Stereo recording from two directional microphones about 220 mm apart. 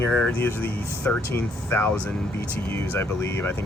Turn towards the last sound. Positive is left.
turn(degrees=10)  # may be behind; listen again after turning